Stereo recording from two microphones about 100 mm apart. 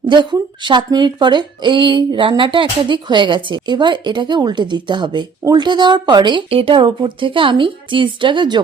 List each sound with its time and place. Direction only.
0.0 s speech: 50° right (ahead or behind)
6.5 s speech: 65° right (ahead or behind); by 8.6 s 50° right (ahead or behind)